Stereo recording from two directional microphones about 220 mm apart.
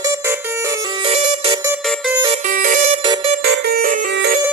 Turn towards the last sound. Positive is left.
turn(degrees=-45)  # may be behind; listen again after turning